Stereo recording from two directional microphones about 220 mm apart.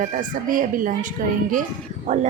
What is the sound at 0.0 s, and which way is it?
A woman's voice, 35° right (ahead or behind).